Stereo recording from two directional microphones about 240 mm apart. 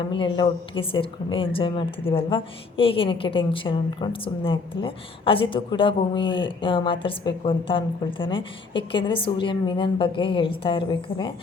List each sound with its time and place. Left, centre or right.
0.0 s a woman's voice: left